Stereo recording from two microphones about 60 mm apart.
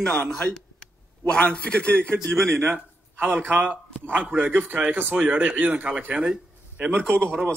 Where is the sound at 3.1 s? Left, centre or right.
Right; by 6.8 s centre.